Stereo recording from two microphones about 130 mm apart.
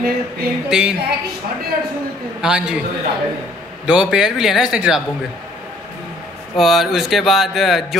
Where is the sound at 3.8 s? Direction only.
10° right (ahead or behind).